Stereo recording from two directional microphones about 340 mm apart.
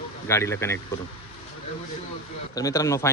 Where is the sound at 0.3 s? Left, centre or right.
Centre.